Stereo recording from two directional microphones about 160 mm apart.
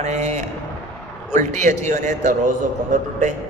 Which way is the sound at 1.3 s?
50° right (ahead or behind).